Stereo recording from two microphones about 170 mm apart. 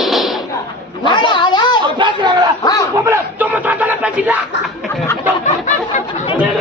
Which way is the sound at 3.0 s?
15° right (ahead or behind).